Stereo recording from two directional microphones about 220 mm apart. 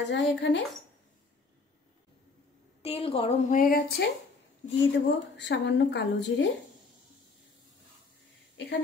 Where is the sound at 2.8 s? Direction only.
25° left (ahead or behind).